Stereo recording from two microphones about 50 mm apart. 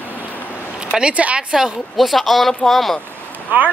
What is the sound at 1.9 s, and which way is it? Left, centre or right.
Speech, centre.